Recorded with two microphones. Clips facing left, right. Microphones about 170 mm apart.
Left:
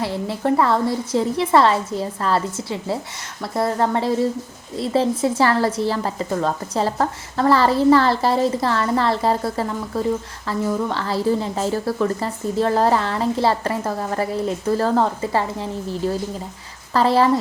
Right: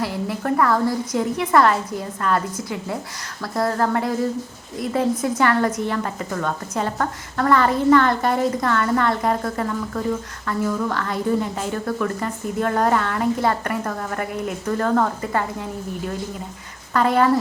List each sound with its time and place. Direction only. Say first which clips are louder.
0.0 s a woman's voice: left 2 dB; 25° left (ahead or behind)
16.9 s a woman's voice: left 1 dB; 30° left (ahead or behind)